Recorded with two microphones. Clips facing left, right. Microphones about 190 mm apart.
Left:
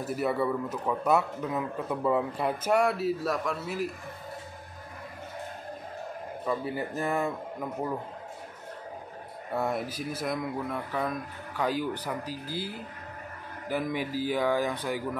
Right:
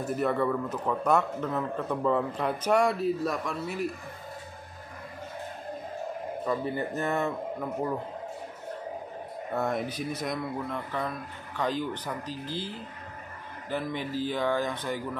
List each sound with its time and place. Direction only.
0.0 s a man's voice: 5° left (ahead or behind)
6.4 s a man's voice: 5° left (ahead or behind)
9.6 s a man's voice: 5° left (ahead or behind)